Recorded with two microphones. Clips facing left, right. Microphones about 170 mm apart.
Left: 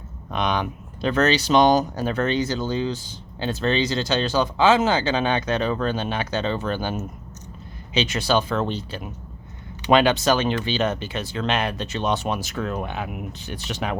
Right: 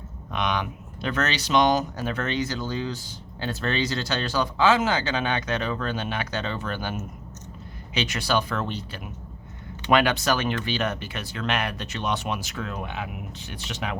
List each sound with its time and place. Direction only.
0.3 s speech: 35° left (ahead or behind)